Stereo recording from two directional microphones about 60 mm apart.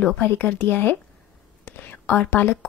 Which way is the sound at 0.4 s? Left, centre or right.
Left.